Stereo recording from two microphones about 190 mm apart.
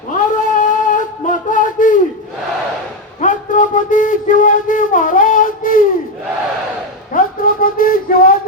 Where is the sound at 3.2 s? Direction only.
45° left (ahead or behind).